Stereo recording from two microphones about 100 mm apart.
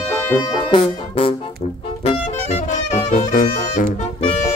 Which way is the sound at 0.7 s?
65° left (ahead or behind).